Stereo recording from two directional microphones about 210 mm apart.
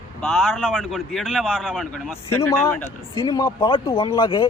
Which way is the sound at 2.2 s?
10° left (ahead or behind).